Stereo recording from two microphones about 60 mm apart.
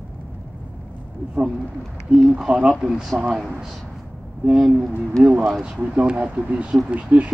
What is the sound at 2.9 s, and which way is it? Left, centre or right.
Speech, centre.